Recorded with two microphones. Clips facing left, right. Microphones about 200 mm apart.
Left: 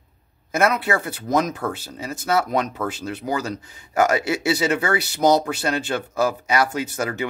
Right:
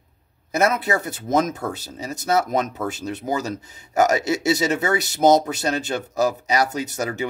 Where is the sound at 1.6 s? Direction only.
40° right (ahead or behind).